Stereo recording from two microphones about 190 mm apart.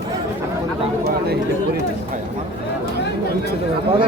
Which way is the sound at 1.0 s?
55° right (ahead or behind).